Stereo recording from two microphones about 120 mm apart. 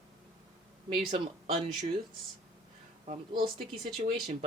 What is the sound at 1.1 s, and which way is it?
Speech, 45° right (ahead or behind).